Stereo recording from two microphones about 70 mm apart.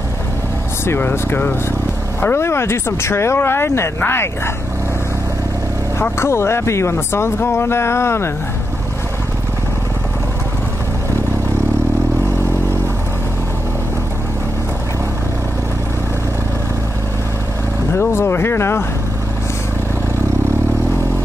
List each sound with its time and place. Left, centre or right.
0.8 s speech: left
6.1 s speech: left
17.9 s speech: left